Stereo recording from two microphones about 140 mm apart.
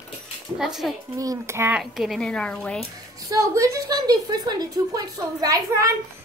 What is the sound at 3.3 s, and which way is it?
A woman's voice, 25° right (ahead or behind).